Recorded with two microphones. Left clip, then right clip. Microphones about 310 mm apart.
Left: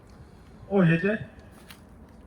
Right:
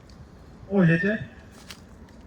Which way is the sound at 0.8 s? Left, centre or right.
Left.